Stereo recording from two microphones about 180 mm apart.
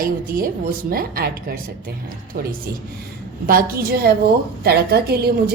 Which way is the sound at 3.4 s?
55° right (ahead or behind).